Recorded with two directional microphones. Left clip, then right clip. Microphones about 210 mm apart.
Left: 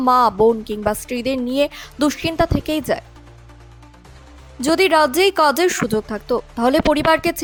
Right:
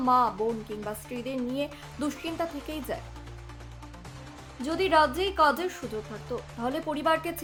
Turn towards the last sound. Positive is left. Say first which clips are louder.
# left 11 dB
turn(degrees=50)  # may be behind; listen again after turning